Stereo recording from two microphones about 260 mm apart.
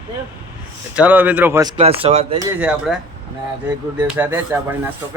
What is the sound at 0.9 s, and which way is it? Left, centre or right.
Speech, centre.